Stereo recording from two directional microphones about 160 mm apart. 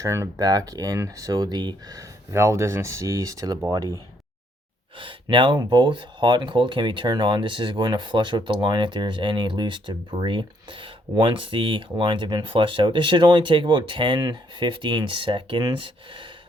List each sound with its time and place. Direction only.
0.0 s speech: 15° right (ahead or behind)
4.9 s speech: 30° right (ahead or behind)